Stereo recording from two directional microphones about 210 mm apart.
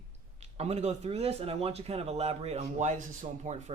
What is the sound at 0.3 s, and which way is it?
Speech, 30° right (ahead or behind).